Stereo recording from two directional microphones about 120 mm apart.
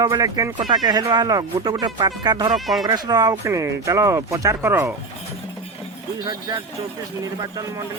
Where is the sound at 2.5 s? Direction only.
Centre (ahead or behind).